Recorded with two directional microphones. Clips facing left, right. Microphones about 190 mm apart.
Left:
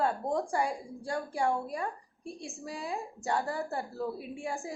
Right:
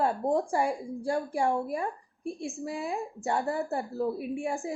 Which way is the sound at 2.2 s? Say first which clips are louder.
Right 7 dB; 55° right (ahead or behind).